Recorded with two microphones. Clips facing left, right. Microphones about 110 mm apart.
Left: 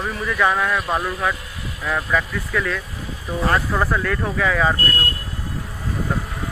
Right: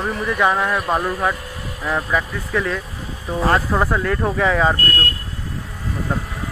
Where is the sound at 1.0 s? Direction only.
35° right (ahead or behind).